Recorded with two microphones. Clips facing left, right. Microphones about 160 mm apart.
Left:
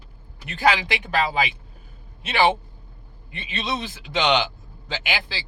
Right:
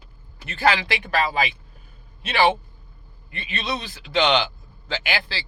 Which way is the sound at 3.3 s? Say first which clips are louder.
Even; 20° left (ahead or behind).